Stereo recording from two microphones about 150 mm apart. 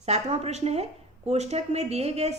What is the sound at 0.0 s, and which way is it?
Speech, 45° right (ahead or behind).